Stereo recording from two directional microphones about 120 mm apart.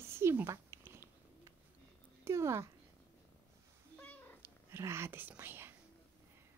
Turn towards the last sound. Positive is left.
turn(degrees=-20)  # may be behind; listen again after turning